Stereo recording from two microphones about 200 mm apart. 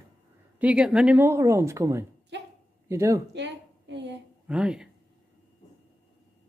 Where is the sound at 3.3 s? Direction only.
60° right (ahead or behind).